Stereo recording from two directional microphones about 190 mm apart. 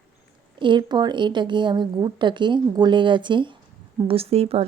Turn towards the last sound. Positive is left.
turn(degrees=-30)  # may be behind; listen again after turning